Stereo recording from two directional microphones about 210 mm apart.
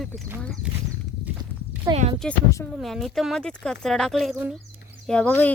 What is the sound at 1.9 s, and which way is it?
Speech, 20° right (ahead or behind).